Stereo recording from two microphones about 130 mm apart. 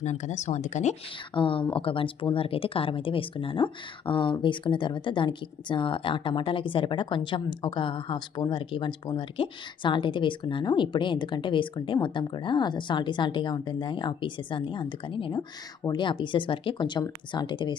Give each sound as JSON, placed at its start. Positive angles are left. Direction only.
{"t": 0.0, "sound": "speech", "side_deg": 65}
{"t": 1.3, "sound": "speech", "side_deg": 40}